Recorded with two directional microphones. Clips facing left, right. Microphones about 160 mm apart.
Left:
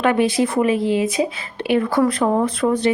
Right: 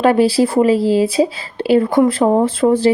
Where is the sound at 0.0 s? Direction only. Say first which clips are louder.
Right 5 dB; 30° right (ahead or behind).